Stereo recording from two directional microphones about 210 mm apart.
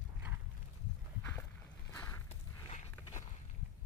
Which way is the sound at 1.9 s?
15° left (ahead or behind).